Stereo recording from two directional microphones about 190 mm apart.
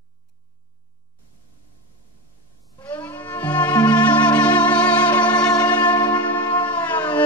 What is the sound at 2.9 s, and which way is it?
Music, 10° left (ahead or behind).